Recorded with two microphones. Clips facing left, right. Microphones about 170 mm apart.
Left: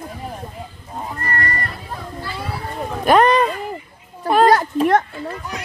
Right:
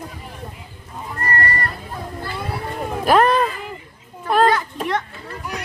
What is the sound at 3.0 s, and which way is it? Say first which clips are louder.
Speech: left 2 dB; centre (ahead or behind).